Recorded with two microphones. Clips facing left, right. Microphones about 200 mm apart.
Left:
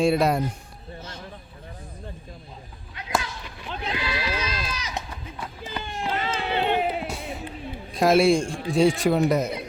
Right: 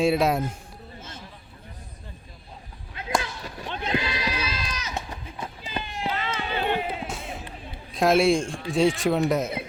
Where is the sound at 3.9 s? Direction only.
20° right (ahead or behind).